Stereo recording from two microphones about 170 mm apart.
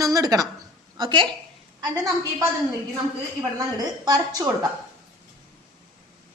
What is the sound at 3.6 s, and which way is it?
Speech, 20° right (ahead or behind).